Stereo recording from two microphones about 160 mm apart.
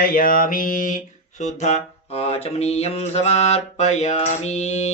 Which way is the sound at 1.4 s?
45° left (ahead or behind).